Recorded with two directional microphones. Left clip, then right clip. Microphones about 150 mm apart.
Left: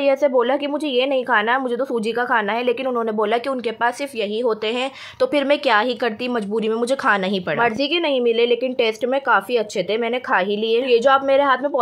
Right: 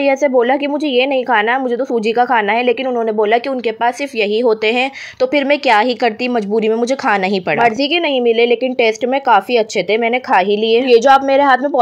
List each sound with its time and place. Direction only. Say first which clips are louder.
0.0 s speech: right 4 dB; 20° right (ahead or behind)
3.8 s speech: right 5 dB; 30° right (ahead or behind)
5.2 s speech: right 4 dB; 15° right (ahead or behind); by 11.8 s 30° right (ahead or behind)